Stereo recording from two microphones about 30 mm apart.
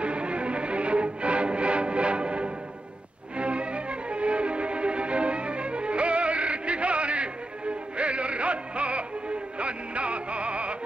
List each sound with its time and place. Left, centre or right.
0.0 s music: right